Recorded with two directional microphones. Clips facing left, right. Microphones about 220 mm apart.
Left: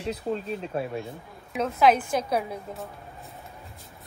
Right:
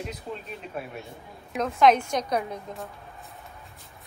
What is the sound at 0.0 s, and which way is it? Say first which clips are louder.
Speech: left 6 dB; 30° left (ahead or behind).